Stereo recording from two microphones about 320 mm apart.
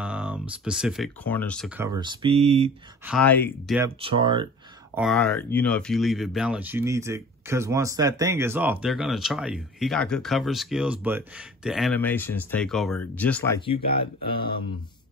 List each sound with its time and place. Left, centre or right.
0.0 s speech: centre
1.8 s speech: centre
3.1 s speech: centre
3.7 s speech: centre
4.9 s speech: centre